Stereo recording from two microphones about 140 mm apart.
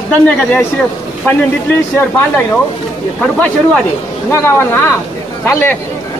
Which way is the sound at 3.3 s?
10° left (ahead or behind).